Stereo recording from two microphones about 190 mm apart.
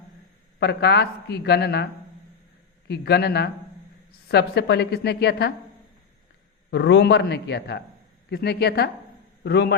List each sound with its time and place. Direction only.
0.6 s a woman's voice: 60° left (ahead or behind)
6.7 s a woman's voice: 65° left (ahead or behind)